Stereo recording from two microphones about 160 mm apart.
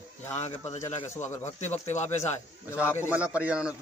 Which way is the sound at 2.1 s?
15° left (ahead or behind).